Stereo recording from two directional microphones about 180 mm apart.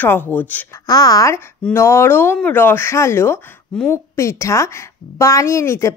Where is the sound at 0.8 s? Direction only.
20° left (ahead or behind).